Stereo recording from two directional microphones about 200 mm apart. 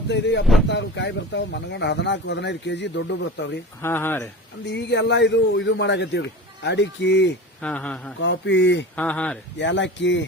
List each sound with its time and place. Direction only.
0.1 s speech: 60° left (ahead or behind)
3.8 s speech: 10° left (ahead or behind)
4.6 s speech: 60° left (ahead or behind)
7.6 s speech: 5° left (ahead or behind)
8.2 s speech: 65° left (ahead or behind)
9.0 s speech: 5° left (ahead or behind)
9.6 s speech: 65° left (ahead or behind)